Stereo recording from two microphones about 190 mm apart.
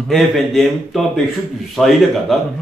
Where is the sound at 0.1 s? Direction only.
Centre (ahead or behind).